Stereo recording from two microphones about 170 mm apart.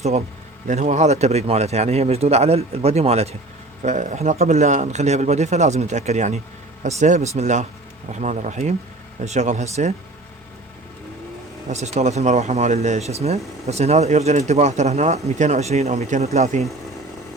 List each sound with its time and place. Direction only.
0.7 s speech: 45° right (ahead or behind)
11.7 s speech: 40° right (ahead or behind)